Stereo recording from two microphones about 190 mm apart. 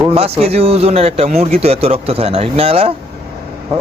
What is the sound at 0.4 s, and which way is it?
Speech, 30° right (ahead or behind).